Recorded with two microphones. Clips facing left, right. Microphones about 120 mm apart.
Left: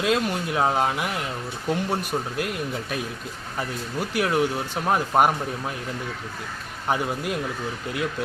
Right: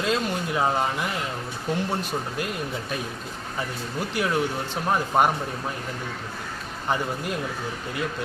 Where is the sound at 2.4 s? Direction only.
Centre (ahead or behind).